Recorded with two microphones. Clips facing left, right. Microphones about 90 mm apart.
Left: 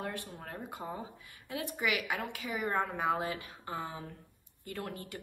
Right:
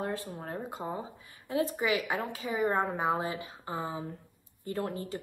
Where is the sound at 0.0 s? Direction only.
25° right (ahead or behind).